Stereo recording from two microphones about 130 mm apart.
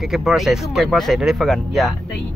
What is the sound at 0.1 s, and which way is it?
Speech, centre (ahead or behind).